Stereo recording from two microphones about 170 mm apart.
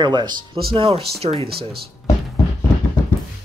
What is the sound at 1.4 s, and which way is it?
Speech, 65° right (ahead or behind).